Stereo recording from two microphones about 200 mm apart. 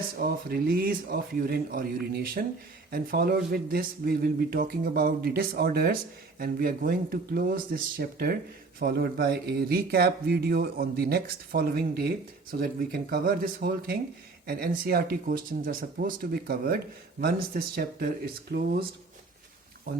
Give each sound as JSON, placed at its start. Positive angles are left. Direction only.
{"t": 0.2, "sound": "speech", "side_deg": -50}